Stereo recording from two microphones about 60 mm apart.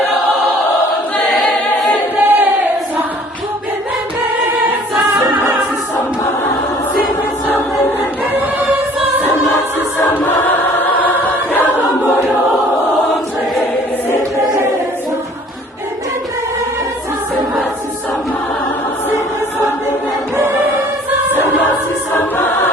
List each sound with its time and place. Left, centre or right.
1.4 s choir: centre
2.2 s a sound: right
10.2 s choir: left
22.1 s choir: left